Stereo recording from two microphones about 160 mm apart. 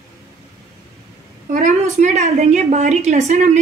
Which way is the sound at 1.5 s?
50° right (ahead or behind).